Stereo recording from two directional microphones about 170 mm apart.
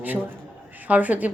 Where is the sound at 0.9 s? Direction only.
10° right (ahead or behind).